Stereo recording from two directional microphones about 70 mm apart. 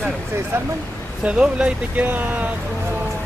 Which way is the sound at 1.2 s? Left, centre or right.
Centre.